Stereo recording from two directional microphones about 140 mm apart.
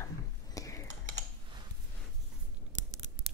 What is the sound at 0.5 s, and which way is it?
Computer keyboard, 25° left (ahead or behind).